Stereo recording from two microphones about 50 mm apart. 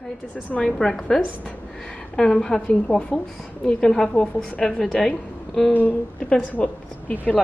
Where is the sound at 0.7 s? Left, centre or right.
Centre.